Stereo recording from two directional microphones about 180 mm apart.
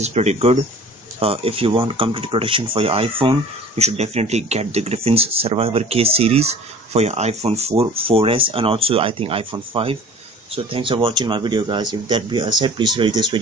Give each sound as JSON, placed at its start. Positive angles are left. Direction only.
{"t": 0.0, "sound": "speech", "side_deg": -40}